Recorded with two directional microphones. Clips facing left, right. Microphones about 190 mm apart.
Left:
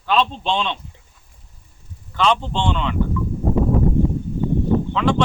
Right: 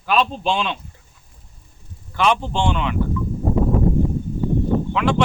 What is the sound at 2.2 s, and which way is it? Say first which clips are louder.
Speech: even; 10° right (ahead or behind).